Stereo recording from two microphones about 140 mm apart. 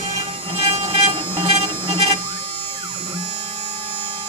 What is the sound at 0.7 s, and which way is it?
Vehicle, 45° right (ahead or behind).